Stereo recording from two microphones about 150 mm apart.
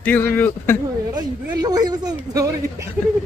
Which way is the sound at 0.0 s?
15° left (ahead or behind).